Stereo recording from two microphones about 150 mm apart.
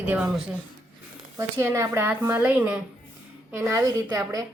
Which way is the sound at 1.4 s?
20° right (ahead or behind).